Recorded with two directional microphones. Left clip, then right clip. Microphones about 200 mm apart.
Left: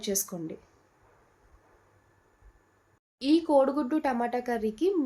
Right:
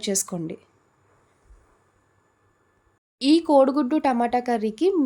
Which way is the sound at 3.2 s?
50° right (ahead or behind).